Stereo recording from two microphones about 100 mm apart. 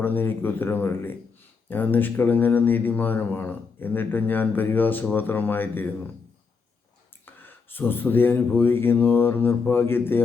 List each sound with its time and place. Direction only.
0.0 s speech: 20° left (ahead or behind)
7.3 s speech: 20° left (ahead or behind)